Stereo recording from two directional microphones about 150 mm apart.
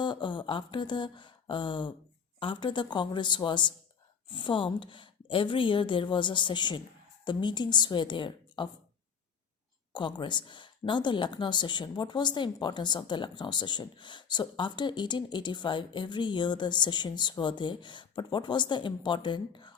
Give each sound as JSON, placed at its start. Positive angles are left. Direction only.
{"t": 0.0, "sound": "a sound", "side_deg": 30}
{"t": 2.4, "sound": "a woman's voice", "side_deg": 35}
{"t": 9.9, "sound": "a woman's voice", "side_deg": 30}